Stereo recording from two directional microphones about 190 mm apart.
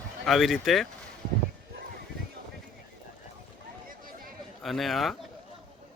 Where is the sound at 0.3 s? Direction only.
Centre (ahead or behind).